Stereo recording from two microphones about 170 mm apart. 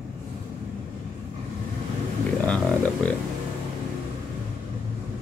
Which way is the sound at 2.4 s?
5° left (ahead or behind).